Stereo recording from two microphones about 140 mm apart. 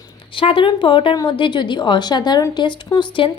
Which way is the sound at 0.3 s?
40° left (ahead or behind).